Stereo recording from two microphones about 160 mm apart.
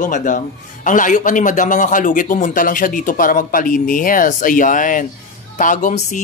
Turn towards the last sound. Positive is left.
turn(degrees=50)  # may be behind; listen again after turning